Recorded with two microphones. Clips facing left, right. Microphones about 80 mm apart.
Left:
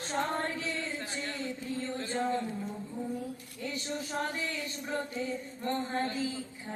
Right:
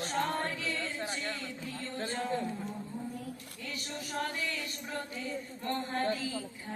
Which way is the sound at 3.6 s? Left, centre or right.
Left.